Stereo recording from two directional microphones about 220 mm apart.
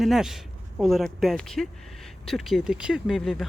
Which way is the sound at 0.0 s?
Centre (ahead or behind).